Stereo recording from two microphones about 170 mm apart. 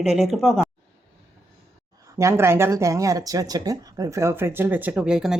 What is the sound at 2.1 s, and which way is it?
Speech, 15° right (ahead or behind).